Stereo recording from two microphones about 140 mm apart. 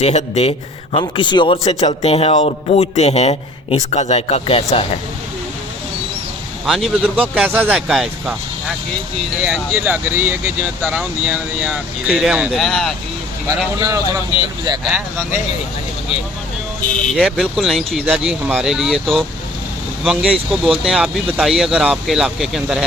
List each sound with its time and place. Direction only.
0.0 s speech: 50° left (ahead or behind)
0.9 s a man's voice: 35° left (ahead or behind)
1.6 s speech: 45° left (ahead or behind)
6.7 s speech: centre (ahead or behind)
9.4 s speech: 10° right (ahead or behind)
13.7 s speech: 20° right (ahead or behind)
17.2 s speech: 5° right (ahead or behind)